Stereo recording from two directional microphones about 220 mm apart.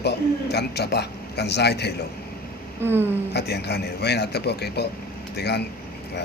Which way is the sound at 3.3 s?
50° left (ahead or behind).